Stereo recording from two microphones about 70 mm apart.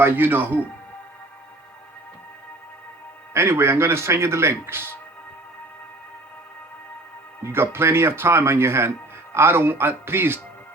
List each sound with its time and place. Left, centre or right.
0.0 s speech: right
3.3 s speech: right
7.4 s speech: right